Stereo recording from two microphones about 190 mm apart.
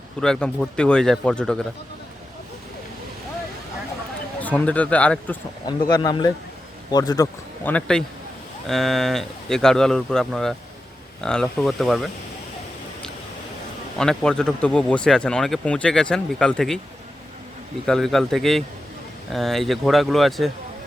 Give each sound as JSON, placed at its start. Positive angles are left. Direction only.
{"t": 0.2, "sound": "speech", "side_deg": 5}
{"t": 4.4, "sound": "speech", "side_deg": 5}
{"t": 5.6, "sound": "speech", "side_deg": 20}
{"t": 7.7, "sound": "speech", "side_deg": 5}
{"t": 14.0, "sound": "speech", "side_deg": 5}
{"t": 17.8, "sound": "speech", "side_deg": 0}